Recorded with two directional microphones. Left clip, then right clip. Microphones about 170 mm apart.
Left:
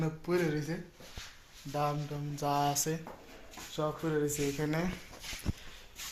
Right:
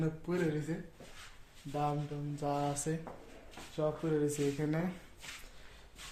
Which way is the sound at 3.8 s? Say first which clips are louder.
Left 1 dB; 5° left (ahead or behind).